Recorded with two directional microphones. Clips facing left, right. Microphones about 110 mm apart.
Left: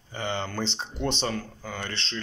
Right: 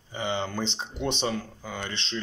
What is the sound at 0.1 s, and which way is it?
Speech, 10° right (ahead or behind).